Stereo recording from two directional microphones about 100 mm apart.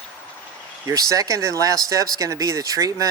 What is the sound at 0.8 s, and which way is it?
Speech, 35° right (ahead or behind).